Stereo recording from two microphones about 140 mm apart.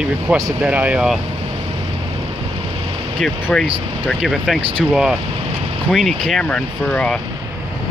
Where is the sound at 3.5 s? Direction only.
10° left (ahead or behind).